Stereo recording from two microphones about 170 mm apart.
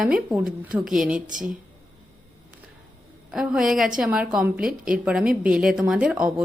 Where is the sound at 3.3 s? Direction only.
5° right (ahead or behind).